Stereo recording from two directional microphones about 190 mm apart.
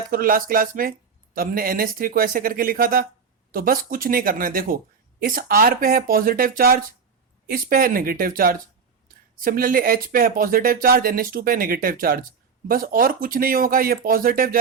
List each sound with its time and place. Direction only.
0.1 s speech: 50° right (ahead or behind)